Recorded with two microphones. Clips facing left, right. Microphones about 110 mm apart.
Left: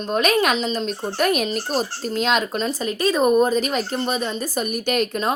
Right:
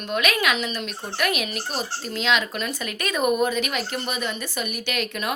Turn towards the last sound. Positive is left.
turn(degrees=40)  # may be behind; listen again after turning